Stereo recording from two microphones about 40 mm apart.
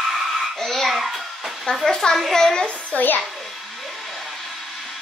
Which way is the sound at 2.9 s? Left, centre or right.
Left.